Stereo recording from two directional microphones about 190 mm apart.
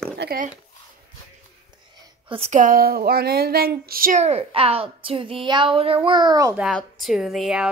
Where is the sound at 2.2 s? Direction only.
30° right (ahead or behind).